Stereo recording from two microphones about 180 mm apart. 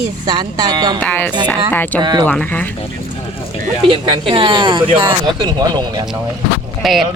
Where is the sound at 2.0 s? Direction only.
25° right (ahead or behind).